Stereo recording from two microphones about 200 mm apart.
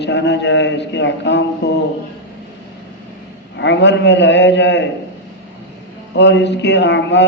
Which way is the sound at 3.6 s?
60° left (ahead or behind).